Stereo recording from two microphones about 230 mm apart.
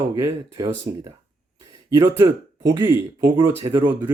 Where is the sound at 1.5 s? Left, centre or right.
Centre.